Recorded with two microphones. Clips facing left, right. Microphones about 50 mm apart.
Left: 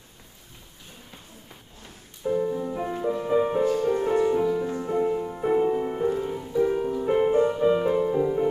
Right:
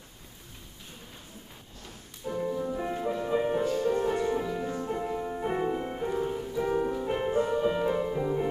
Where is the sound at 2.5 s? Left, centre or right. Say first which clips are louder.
Left 2 dB; centre.